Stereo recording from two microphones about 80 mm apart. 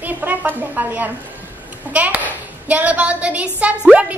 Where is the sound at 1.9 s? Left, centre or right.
Centre.